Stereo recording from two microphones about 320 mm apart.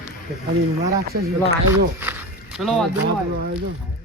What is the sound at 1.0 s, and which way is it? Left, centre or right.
Speech, right.